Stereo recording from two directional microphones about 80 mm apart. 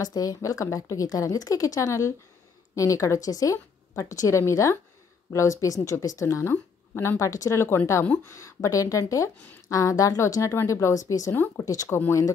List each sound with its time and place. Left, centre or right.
0.0 s a woman's voice: left
6.5 s a woman's voice: left
11.3 s speech: left
11.6 s a woman's voice: left